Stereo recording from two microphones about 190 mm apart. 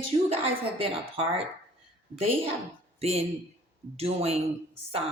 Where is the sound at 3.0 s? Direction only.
30° right (ahead or behind).